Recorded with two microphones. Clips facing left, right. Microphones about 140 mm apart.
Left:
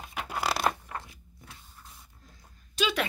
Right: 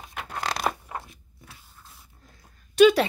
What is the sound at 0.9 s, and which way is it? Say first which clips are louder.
Crunch: right 3 dB; 20° right (ahead or behind).